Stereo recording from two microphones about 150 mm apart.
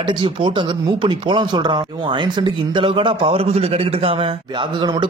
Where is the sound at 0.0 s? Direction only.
35° right (ahead or behind).